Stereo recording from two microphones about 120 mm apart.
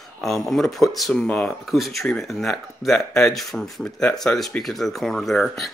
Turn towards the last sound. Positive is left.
turn(degrees=0)  # may be behind; listen again after turning